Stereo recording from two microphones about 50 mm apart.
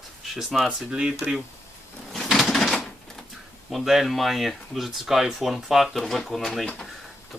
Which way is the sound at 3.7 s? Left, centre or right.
Centre.